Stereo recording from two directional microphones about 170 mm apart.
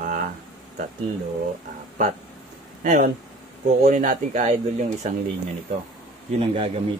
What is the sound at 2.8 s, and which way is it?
Speech, 50° right (ahead or behind).